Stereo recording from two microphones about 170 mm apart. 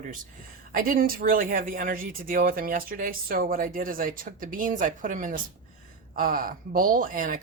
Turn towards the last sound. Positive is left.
turn(degrees=-55)  # may be behind; listen again after turning